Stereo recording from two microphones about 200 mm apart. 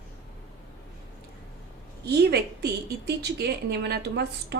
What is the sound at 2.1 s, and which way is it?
A woman's voice, 55° right (ahead or behind).